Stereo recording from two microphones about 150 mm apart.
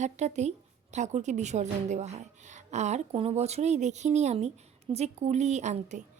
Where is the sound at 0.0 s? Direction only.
50° right (ahead or behind).